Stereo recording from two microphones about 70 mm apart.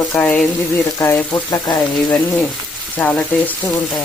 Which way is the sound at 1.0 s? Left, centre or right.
Left.